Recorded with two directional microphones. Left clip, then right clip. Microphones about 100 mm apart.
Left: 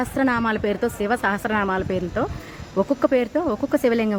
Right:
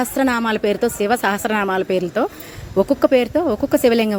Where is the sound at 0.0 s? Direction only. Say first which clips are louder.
Right 3 dB; 20° right (ahead or behind).